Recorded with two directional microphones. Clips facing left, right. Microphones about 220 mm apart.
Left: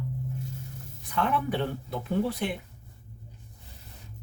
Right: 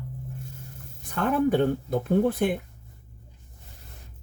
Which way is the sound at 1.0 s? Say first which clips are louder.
Right 5 dB; 45° right (ahead or behind).